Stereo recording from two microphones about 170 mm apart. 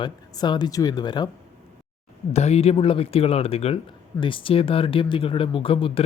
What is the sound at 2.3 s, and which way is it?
Speech, 40° left (ahead or behind).